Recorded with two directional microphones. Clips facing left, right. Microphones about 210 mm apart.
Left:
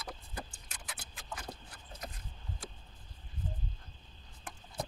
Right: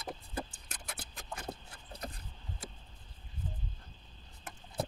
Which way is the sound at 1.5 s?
35° right (ahead or behind).